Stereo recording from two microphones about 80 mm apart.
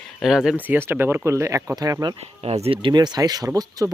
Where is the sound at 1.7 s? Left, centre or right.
Right.